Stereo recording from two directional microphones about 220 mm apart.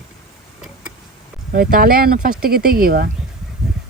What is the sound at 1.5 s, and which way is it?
Speech, 40° right (ahead or behind).